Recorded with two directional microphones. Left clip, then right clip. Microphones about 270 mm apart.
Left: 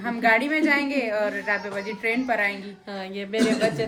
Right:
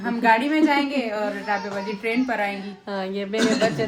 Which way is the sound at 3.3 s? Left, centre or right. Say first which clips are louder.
Right 1 dB; centre.